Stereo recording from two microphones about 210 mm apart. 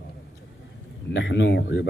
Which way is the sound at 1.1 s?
60° left (ahead or behind).